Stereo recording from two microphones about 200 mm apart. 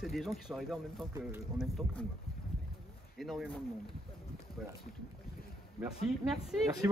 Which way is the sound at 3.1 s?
Centre (ahead or behind).